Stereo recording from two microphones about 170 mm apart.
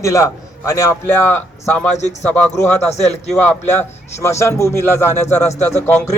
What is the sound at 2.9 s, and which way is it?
Speech, 40° left (ahead or behind).